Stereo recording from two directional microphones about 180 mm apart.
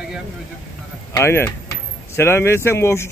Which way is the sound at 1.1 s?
15° left (ahead or behind).